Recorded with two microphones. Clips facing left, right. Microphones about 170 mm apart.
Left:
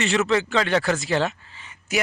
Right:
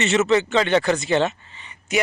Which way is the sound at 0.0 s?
Centre (ahead or behind).